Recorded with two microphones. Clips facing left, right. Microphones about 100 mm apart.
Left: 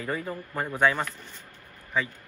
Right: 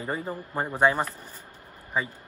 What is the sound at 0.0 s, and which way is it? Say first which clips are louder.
Speech: even; 25° right (ahead or behind).